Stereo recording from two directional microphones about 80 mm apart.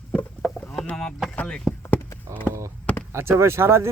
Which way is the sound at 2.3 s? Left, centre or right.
Right.